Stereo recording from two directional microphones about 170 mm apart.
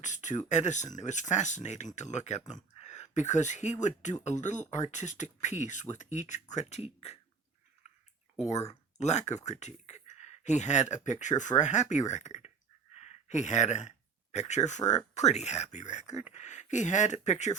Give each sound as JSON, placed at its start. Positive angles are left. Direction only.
{"t": 0.0, "sound": "speech", "side_deg": 45}
{"t": 8.4, "sound": "speech", "side_deg": 40}
{"t": 12.9, "sound": "a sound", "side_deg": 40}
{"t": 14.3, "sound": "speech", "side_deg": 45}